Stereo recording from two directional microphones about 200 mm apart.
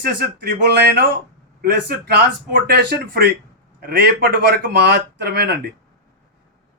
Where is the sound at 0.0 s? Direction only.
55° right (ahead or behind).